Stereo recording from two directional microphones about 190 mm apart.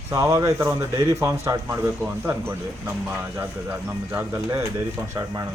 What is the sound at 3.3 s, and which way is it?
Speech, 15° right (ahead or behind).